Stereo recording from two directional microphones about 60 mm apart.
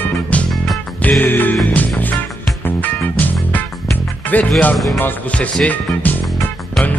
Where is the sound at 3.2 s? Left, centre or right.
Left.